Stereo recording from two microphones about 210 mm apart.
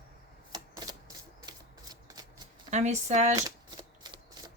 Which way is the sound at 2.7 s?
35° right (ahead or behind).